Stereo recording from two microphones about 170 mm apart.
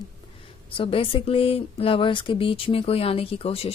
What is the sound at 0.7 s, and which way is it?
Speech, 30° left (ahead or behind).